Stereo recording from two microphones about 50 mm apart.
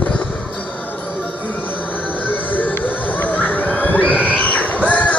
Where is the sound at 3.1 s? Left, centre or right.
Left.